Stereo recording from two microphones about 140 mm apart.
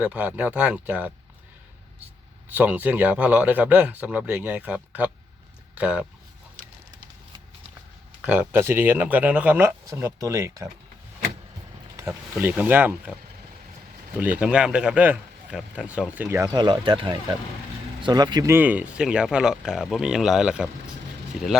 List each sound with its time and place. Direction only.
0.0 s speech: 10° right (ahead or behind)
2.5 s speech: 10° right (ahead or behind)
8.2 s speech: 10° right (ahead or behind)
11.9 s speech: 15° right (ahead or behind)
14.2 s speech: 10° right (ahead or behind)
16.5 s speech: 30° right (ahead or behind)
18.5 s speech: 10° right (ahead or behind)